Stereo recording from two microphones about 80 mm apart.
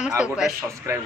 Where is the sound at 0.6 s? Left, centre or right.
Right.